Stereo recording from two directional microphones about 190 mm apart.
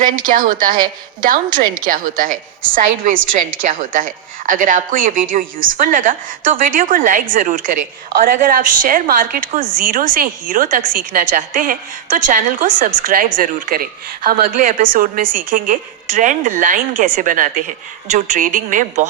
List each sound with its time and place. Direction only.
0.0 s a woman's voice: 45° right (ahead or behind)